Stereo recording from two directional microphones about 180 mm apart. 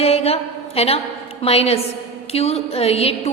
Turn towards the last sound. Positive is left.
turn(degrees=35)  # may be behind; listen again after turning